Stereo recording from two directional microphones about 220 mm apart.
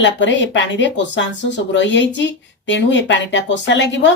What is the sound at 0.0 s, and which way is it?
Speech, 55° left (ahead or behind).